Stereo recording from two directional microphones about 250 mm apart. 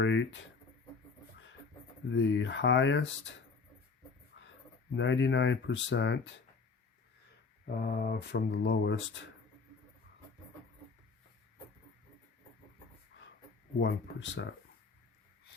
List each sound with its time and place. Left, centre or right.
0.0 s a sound: left
2.0 s speech: left
4.4 s a sound: left
4.9 s speech: left
7.8 s speech: left
13.7 s speech: left